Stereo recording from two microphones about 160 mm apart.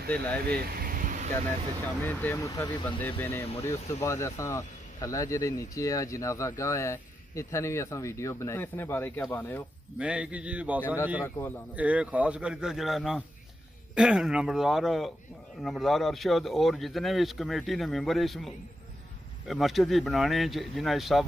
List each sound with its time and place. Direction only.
0.1 s speech: 10° left (ahead or behind)
0.7 s vehicle: 65° right (ahead or behind)
2.0 s speech: 15° left (ahead or behind)
9.9 s a man's voice: 5° right (ahead or behind)
11.2 s speech: 15° left (ahead or behind)
11.7 s a man's voice: 10° right (ahead or behind)